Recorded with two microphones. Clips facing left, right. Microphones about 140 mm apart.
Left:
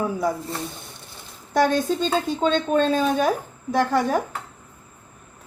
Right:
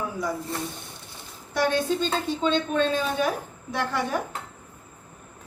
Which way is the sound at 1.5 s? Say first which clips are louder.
Left 4 dB; 45° left (ahead or behind).